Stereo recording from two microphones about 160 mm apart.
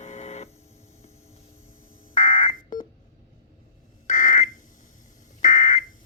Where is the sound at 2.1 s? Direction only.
50° left (ahead or behind).